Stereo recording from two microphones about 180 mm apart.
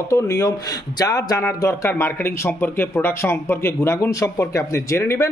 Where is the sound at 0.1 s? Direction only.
20° left (ahead or behind).